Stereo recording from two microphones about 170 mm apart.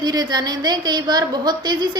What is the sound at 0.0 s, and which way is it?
A woman's voice, 25° right (ahead or behind).